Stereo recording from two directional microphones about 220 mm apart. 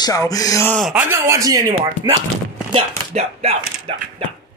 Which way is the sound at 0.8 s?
5° right (ahead or behind).